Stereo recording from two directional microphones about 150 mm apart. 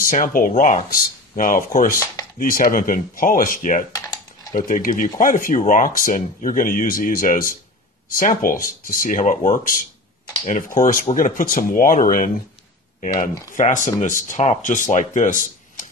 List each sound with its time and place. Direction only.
0.0 s speech: 65° left (ahead or behind)
3.9 s typing: 25° left (ahead or behind)
4.6 s speech: 65° left (ahead or behind)